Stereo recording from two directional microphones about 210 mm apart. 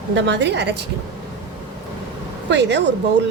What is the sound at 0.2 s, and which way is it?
Speech, 55° right (ahead or behind).